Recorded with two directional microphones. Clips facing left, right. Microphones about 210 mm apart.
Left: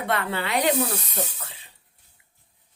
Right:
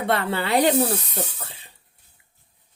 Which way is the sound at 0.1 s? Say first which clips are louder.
Right 4 dB; 35° right (ahead or behind).